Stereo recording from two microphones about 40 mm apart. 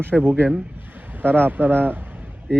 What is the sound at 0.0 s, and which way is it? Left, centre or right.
Speech, right.